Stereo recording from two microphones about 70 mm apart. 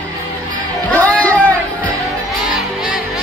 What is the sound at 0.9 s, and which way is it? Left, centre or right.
Music, left.